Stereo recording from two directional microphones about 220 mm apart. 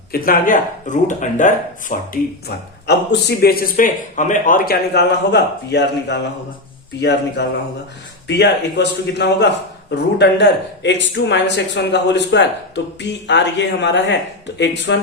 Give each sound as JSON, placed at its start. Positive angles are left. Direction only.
{"t": 0.1, "sound": "speech", "side_deg": 40}
{"t": 2.8, "sound": "speech", "side_deg": 50}